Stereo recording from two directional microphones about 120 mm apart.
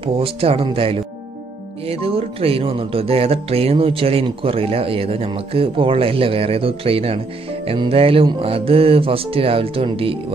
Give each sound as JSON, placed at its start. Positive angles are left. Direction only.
{"t": 0.0, "sound": "speech", "side_deg": -50}